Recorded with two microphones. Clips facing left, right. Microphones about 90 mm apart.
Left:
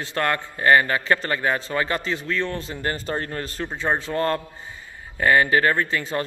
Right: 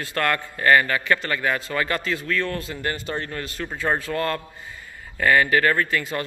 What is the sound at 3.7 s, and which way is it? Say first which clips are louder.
A man's voice: even; 20° left (ahead or behind).